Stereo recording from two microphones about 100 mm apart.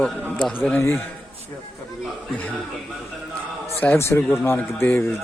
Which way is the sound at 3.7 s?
20° left (ahead or behind).